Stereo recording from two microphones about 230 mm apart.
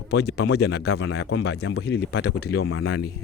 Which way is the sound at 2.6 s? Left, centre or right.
Left.